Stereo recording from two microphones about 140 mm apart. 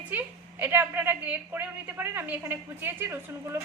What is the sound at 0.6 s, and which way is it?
A woman's voice, 15° right (ahead or behind).